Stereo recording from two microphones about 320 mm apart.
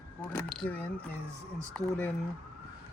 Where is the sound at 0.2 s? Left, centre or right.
Centre.